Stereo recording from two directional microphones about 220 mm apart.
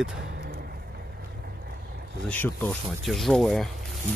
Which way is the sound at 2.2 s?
10° left (ahead or behind).